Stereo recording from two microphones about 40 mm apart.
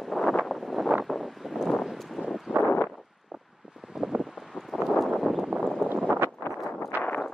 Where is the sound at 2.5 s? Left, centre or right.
Centre.